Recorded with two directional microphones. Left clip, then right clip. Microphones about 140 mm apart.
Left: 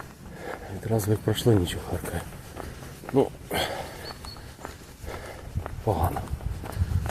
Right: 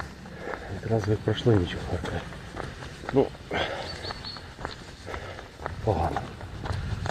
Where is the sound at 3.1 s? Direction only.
35° left (ahead or behind).